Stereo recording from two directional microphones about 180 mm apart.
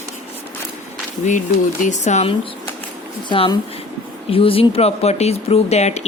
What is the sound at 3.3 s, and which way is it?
Speech, 25° left (ahead or behind).